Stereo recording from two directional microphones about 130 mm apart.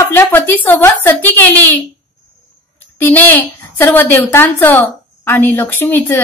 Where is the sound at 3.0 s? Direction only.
15° left (ahead or behind).